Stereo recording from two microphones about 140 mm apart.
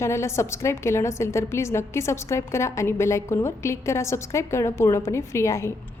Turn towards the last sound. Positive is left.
turn(degrees=20)  # may be behind; listen again after turning